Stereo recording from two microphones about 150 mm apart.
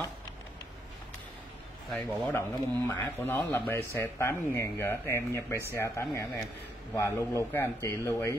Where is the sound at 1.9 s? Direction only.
5° left (ahead or behind).